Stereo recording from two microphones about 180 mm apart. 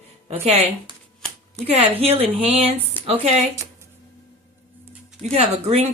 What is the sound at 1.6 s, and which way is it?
Speech, 35° right (ahead or behind).